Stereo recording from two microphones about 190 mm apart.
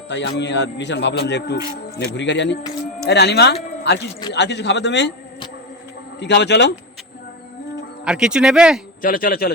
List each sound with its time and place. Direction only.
0.1 s a man's voice: 65° left (ahead or behind)
6.1 s a man's voice: 65° left (ahead or behind)
8.0 s speech: 5° right (ahead or behind)
9.0 s speech: 45° left (ahead or behind)